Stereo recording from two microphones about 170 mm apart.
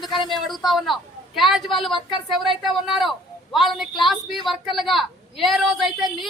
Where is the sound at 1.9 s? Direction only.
25° left (ahead or behind).